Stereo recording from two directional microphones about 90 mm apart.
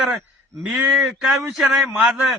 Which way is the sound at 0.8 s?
15° right (ahead or behind).